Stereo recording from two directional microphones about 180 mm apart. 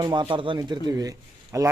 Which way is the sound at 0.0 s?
25° right (ahead or behind).